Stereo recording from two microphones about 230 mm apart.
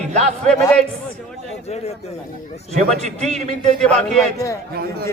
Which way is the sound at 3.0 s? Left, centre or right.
Right.